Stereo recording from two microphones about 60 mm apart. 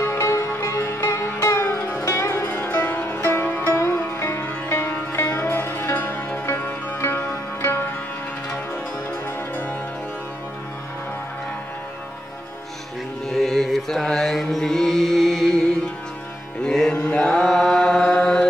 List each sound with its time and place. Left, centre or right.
0.0 s music: left
3.7 s music: left
13.3 s music: centre
16.6 s music: centre
16.9 s mantra: left
17.2 s mantra: centre